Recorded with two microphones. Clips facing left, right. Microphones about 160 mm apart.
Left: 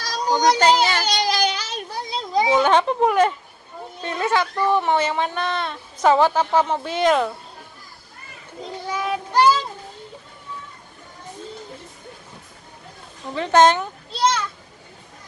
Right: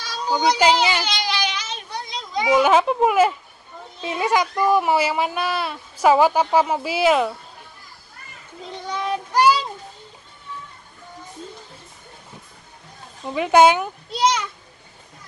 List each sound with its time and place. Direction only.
0.4 s speech: 5° right (ahead or behind)
1.0 s a sound: 40° left (ahead or behind)
2.6 s speech: 5° right (ahead or behind)
8.8 s child singing: 5° left (ahead or behind)
9.3 s child singing: 10° right (ahead or behind)
13.3 s speech: 10° right (ahead or behind)